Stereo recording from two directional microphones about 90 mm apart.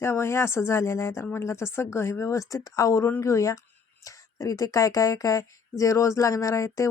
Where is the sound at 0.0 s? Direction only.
30° left (ahead or behind).